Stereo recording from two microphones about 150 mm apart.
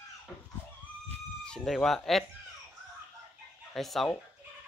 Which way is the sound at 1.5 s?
5° left (ahead or behind).